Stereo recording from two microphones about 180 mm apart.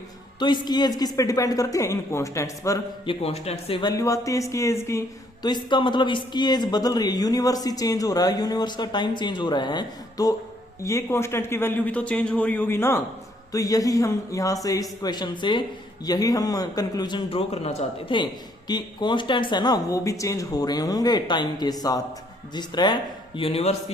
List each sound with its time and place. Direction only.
0.3 s speech: 25° left (ahead or behind)
3.1 s a man's voice: 35° left (ahead or behind)